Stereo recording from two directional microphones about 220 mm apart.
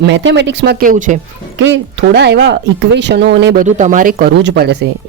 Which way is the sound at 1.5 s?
55° right (ahead or behind).